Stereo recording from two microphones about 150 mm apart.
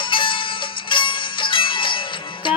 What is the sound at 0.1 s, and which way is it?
Music, 35° left (ahead or behind).